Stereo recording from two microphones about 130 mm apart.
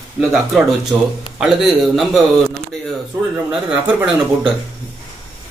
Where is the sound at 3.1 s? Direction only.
20° right (ahead or behind).